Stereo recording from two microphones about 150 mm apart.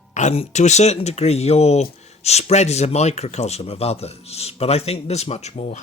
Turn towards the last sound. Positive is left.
turn(degrees=50)  # may be behind; listen again after turning